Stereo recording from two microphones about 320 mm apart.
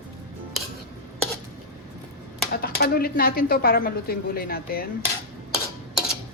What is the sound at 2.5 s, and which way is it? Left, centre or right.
Speech, left.